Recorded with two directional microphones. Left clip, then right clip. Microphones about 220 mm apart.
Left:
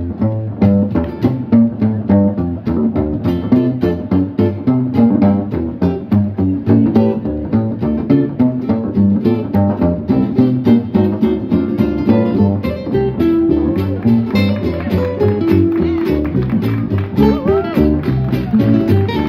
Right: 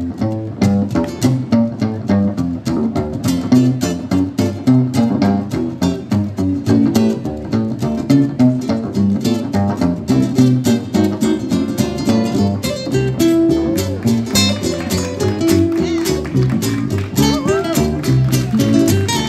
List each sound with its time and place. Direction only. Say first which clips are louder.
1.2 s music: left 5 dB; 55° right (ahead or behind)
3.3 s music: right 2 dB; 60° right (ahead or behind)
6.7 s music: left 2 dB; 60° right (ahead or behind)